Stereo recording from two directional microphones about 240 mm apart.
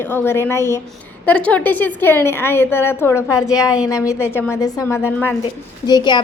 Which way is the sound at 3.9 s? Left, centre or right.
Centre.